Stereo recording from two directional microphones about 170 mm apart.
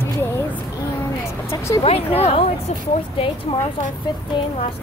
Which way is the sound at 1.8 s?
35° left (ahead or behind).